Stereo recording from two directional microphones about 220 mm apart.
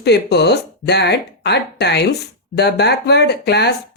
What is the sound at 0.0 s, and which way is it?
Speech, 50° left (ahead or behind).